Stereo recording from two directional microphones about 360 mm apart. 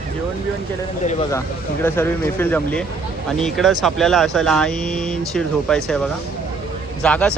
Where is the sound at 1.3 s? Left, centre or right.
Centre.